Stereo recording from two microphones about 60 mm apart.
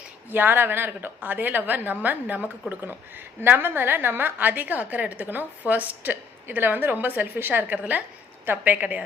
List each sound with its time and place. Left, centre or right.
0.3 s a woman's voice: right